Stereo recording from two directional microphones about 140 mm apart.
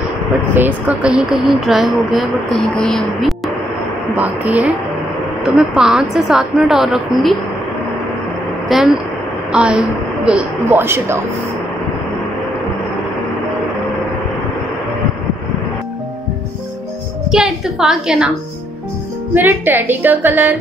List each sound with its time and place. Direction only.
0.6 s speech: 10° right (ahead or behind)
4.1 s a woman's voice: 10° right (ahead or behind)
8.7 s a woman's voice: centre (ahead or behind); by 11.1 s 15° right (ahead or behind)
17.3 s speech: 5° right (ahead or behind)
19.3 s a woman's voice: 15° right (ahead or behind)